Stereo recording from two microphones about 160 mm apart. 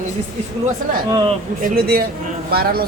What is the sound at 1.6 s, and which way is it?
Speech, 70° right (ahead or behind).